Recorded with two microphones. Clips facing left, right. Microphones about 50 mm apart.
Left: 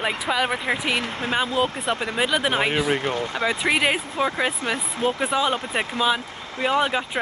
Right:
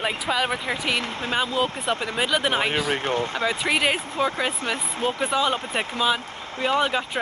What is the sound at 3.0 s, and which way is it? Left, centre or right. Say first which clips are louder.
Speech: right 1 dB; right.